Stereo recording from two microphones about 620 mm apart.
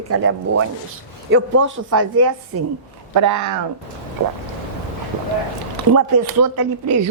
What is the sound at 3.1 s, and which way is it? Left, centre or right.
Speech, right.